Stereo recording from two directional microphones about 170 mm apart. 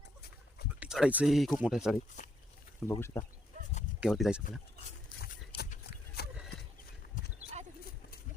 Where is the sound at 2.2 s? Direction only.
45° left (ahead or behind).